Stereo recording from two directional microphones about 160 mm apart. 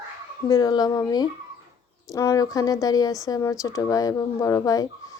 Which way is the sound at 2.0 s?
20° left (ahead or behind).